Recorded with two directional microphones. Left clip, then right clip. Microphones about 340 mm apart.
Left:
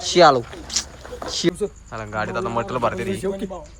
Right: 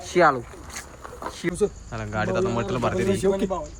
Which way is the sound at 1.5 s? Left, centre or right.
Centre.